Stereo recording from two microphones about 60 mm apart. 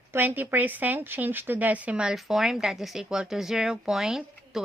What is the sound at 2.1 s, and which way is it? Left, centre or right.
Speech, centre.